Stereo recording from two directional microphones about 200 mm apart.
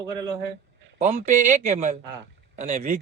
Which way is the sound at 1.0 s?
35° right (ahead or behind).